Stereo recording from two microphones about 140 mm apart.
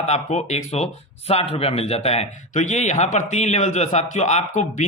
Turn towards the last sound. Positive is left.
turn(degrees=55)  # may be behind; listen again after turning